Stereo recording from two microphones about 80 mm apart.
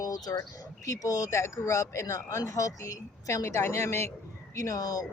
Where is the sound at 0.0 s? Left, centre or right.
Left.